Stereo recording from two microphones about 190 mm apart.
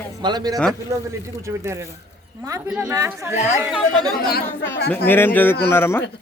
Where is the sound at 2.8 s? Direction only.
15° right (ahead or behind).